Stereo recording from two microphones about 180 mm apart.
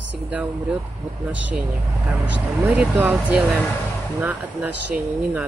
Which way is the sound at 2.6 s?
10° right (ahead or behind).